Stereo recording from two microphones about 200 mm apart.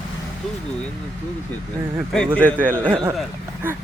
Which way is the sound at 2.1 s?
5° left (ahead or behind).